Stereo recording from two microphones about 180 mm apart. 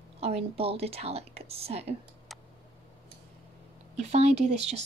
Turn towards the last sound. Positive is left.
turn(degrees=-35)  # may be behind; listen again after turning